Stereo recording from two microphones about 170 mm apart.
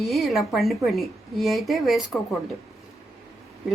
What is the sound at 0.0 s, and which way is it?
Speech, centre (ahead or behind).